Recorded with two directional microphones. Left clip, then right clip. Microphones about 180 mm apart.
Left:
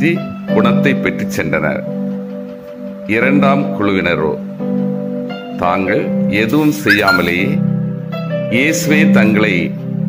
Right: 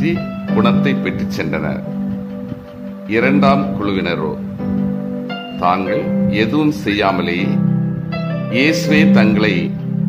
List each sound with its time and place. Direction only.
0.0 s speech: 15° left (ahead or behind)
3.1 s speech: 15° left (ahead or behind)
5.9 s speech: 15° left (ahead or behind)
8.5 s speech: 15° left (ahead or behind)